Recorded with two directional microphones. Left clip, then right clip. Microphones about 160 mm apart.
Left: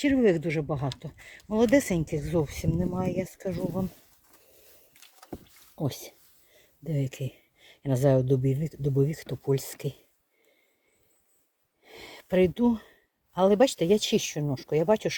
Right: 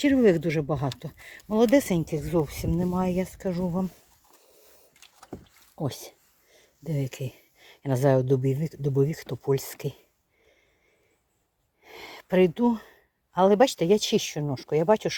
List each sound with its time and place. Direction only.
0.0 s speech: 35° right (ahead or behind); by 3.8 s 5° right (ahead or behind)
5.7 s speech: 15° left (ahead or behind)
11.8 s a sound: centre (ahead or behind)
14.1 s speech: 10° left (ahead or behind)